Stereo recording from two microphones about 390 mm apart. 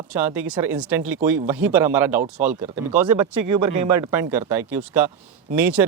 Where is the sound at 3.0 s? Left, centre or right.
Right.